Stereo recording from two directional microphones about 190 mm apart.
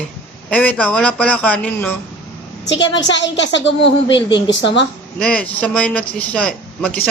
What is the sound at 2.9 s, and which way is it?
Speech, 70° left (ahead or behind).